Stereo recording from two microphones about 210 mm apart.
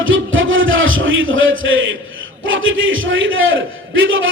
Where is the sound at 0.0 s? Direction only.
70° right (ahead or behind).